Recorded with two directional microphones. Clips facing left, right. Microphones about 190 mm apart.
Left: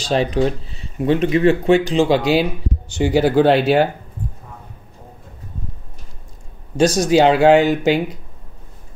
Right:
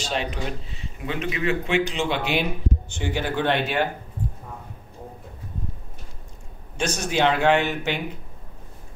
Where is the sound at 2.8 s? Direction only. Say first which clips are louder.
Left 10 dB; 90° left.